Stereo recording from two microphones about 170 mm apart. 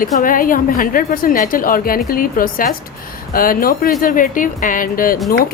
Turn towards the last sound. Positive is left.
turn(degrees=55)  # may be behind; listen again after turning